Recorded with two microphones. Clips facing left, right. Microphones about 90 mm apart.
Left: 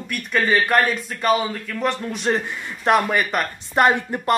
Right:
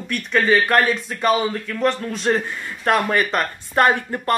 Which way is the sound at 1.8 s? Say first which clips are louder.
Right 2 dB; 15° left (ahead or behind).